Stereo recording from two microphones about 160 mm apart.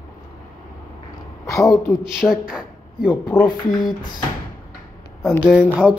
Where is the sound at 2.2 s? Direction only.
5° right (ahead or behind).